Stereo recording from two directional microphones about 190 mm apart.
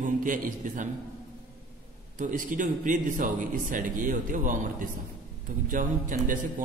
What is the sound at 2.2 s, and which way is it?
Speech, 45° right (ahead or behind).